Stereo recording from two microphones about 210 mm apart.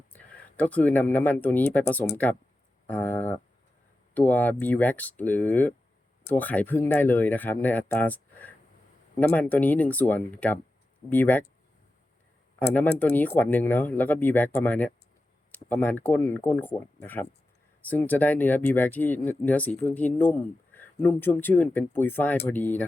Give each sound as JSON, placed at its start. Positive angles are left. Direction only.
{"t": 0.1, "sound": "speech", "side_deg": 5}
{"t": 12.5, "sound": "speech", "side_deg": 10}